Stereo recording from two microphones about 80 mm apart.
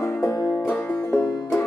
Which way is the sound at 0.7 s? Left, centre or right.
Centre.